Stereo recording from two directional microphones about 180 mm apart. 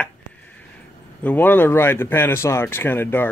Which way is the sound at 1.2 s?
10° left (ahead or behind).